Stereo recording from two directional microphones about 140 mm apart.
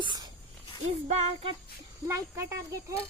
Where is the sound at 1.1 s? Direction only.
45° right (ahead or behind).